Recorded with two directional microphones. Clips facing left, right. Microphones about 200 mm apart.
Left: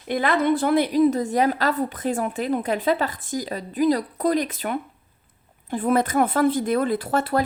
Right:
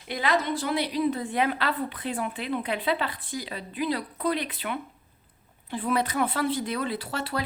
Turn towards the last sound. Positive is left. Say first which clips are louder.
# left 9 dB
turn(degrees=50)  # may be behind; listen again after turning